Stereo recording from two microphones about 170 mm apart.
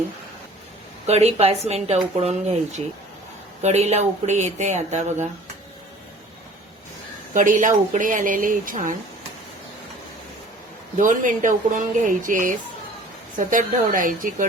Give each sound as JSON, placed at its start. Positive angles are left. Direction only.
{"t": 1.0, "sound": "speech", "side_deg": -40}
{"t": 7.3, "sound": "speech", "side_deg": -50}
{"t": 10.9, "sound": "speech", "side_deg": -50}